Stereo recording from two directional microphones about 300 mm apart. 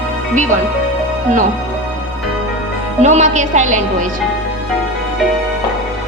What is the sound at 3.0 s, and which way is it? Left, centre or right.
A woman's voice, right.